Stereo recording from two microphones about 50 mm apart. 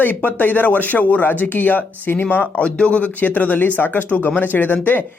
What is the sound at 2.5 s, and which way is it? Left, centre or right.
Speech, left.